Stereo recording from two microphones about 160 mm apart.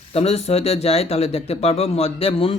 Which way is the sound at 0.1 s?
40° left (ahead or behind).